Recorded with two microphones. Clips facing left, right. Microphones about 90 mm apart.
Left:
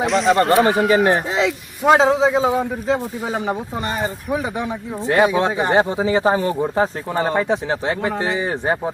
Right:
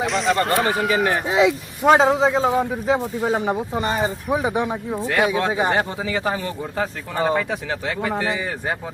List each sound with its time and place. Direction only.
0.0 s speech: centre (ahead or behind)
1.3 s speech: 10° right (ahead or behind)
1.8 s speech: centre (ahead or behind)
2.8 s speech: 15° right (ahead or behind)
3.2 s speech: centre (ahead or behind)
4.3 s speech: 15° right (ahead or behind)
5.0 s speech: 25° left (ahead or behind)
5.5 s speech: 10° right (ahead or behind)
5.7 s speech: 25° left (ahead or behind)